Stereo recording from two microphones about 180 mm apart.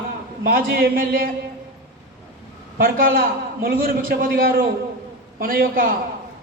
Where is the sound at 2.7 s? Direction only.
55° right (ahead or behind).